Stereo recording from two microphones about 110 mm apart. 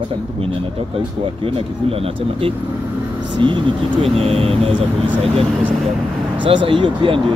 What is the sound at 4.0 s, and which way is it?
Speech, 65° right (ahead or behind).